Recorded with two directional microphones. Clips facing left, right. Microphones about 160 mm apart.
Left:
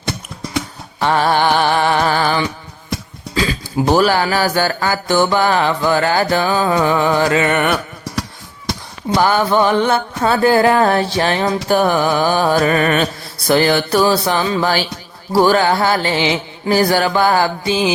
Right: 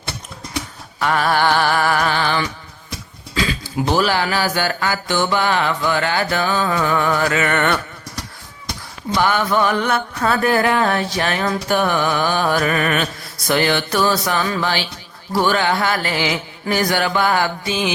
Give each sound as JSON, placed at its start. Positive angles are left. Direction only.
{"t": 0.9, "sound": "music", "side_deg": 30}
{"t": 2.0, "sound": "music", "side_deg": 40}
{"t": 9.1, "sound": "music", "side_deg": 35}
{"t": 14.6, "sound": "music", "side_deg": 40}